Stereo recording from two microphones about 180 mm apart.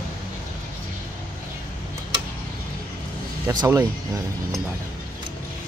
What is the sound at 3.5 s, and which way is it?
Speech, 20° right (ahead or behind).